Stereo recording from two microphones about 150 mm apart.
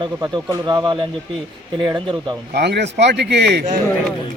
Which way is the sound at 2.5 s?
90° right.